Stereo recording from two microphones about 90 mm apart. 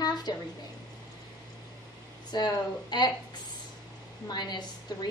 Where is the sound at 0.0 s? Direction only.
50° left (ahead or behind).